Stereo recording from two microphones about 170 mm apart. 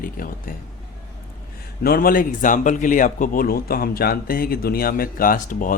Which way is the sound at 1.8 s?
60° left (ahead or behind).